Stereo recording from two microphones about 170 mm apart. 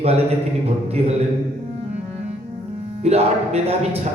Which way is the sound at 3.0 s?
40° right (ahead or behind).